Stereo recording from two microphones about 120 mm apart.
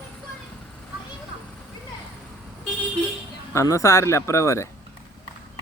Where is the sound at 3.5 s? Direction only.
25° left (ahead or behind).